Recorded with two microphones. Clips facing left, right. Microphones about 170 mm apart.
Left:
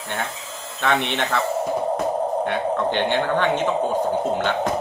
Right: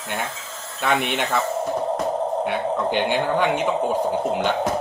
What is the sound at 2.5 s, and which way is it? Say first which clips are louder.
Speech: even; 10° right (ahead or behind).